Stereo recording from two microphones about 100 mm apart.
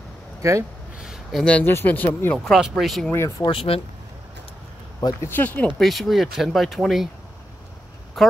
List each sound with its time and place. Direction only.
0.4 s speech: 30° right (ahead or behind)
0.9 s a sound: 5° right (ahead or behind)
1.4 s speech: 10° left (ahead or behind)
2.3 s speech: centre (ahead or behind)
3.1 s speech: 30° left (ahead or behind)
3.4 s speech: 65° left (ahead or behind)
5.2 s speech: 20° left (ahead or behind)
5.8 s speech: centre (ahead or behind)
8.2 s speech: centre (ahead or behind)